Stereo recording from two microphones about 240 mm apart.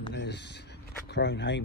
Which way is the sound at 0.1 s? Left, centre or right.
Left.